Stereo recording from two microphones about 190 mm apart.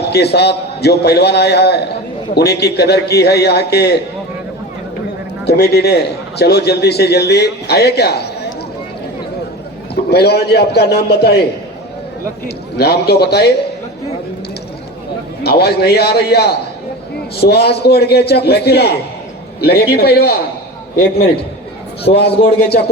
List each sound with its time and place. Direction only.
0.0 s a man's voice: 60° left (ahead or behind)
5.5 s a man's voice: 60° left (ahead or behind)
9.9 s a man's voice: 60° left (ahead or behind)
12.5 s a man's voice: 55° left (ahead or behind)
15.4 s a man's voice: 55° left (ahead or behind)
22.0 s a man's voice: 30° left (ahead or behind)